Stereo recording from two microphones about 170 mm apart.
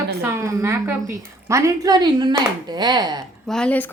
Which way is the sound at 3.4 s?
5° left (ahead or behind).